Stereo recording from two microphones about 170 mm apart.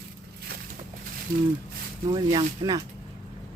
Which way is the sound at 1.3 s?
55° right (ahead or behind).